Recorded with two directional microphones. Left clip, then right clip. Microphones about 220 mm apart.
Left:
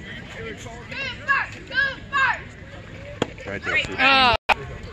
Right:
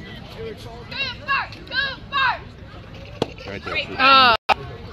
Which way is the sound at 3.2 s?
25° right (ahead or behind).